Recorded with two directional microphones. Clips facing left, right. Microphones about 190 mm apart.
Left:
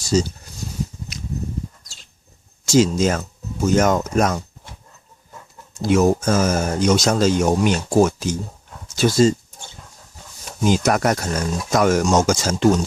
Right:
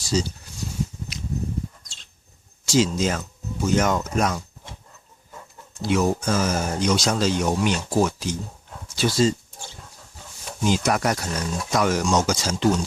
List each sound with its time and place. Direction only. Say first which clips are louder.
0.0 s speech: left 5 dB; 45° left (ahead or behind)
2.6 s speech: left 5 dB; 45° left (ahead or behind)
5.8 s speech: left 5 dB; 45° left (ahead or behind)
10.6 s speech: left 4 dB; 45° left (ahead or behind)